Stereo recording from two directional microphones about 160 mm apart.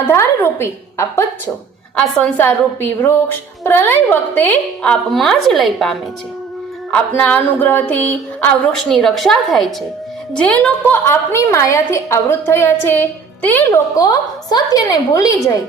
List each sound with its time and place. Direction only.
0.1 s a woman's voice: 15° left (ahead or behind)
2.0 s a woman's voice: 5° left (ahead or behind); by 15.5 s 20° left (ahead or behind)